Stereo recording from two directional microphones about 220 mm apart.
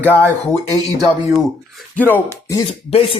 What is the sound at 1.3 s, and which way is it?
Speech, 5° left (ahead or behind).